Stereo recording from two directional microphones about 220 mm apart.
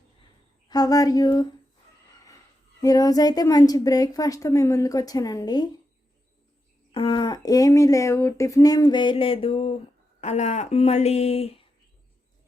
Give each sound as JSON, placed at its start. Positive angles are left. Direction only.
{"t": 0.7, "sound": "a woman's voice", "side_deg": 15}
{"t": 2.8, "sound": "a woman's voice", "side_deg": 15}
{"t": 6.9, "sound": "a woman's voice", "side_deg": 25}